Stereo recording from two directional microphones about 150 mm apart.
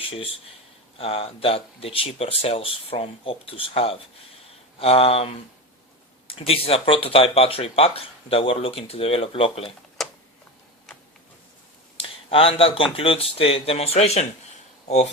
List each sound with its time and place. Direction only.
0.9 s speech: 40° left (ahead or behind)
10.0 s a sound: centre (ahead or behind)
11.9 s speech: 40° left (ahead or behind)